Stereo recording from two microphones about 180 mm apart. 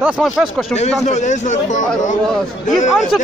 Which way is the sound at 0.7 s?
40° left (ahead or behind).